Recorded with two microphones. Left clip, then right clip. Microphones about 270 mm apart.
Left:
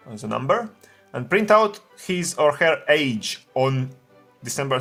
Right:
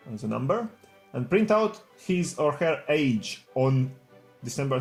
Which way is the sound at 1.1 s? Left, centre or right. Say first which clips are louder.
Left 6 dB; left.